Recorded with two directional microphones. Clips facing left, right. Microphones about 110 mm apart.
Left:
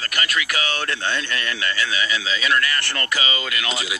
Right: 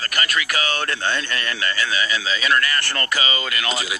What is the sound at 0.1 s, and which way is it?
Speech, 40° right (ahead or behind).